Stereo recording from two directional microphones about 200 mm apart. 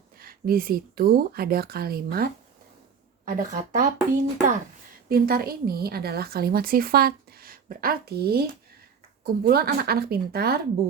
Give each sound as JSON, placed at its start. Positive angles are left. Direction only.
{"t": 0.2, "sound": "a woman's voice", "side_deg": -45}